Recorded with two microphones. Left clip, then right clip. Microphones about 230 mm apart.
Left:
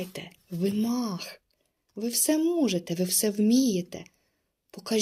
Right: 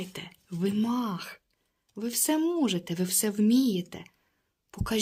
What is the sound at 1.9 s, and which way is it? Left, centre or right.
Speech, centre.